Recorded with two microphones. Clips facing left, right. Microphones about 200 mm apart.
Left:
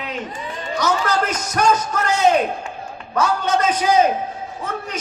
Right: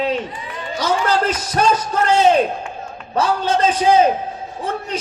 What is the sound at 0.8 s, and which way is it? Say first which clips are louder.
A man's voice: right 2 dB; 30° right (ahead or behind).